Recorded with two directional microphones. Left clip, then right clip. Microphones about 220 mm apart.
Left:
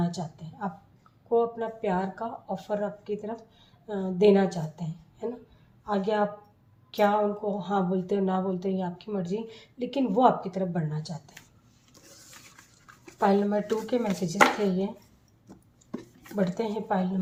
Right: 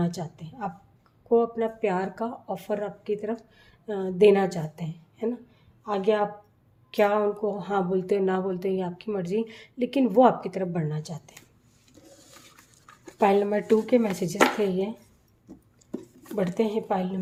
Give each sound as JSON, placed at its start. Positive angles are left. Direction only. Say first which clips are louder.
{"t": 0.0, "sound": "speech", "louder": "right 2 dB", "side_deg": -45}
{"t": 13.1, "sound": "speech", "louder": "right 3 dB", "side_deg": -45}
{"t": 16.4, "sound": "speech", "louder": "right 3 dB", "side_deg": -45}